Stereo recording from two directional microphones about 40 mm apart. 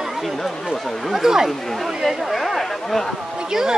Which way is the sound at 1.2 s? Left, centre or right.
Centre.